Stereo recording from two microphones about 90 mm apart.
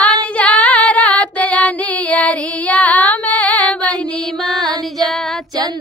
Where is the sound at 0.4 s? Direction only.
15° left (ahead or behind).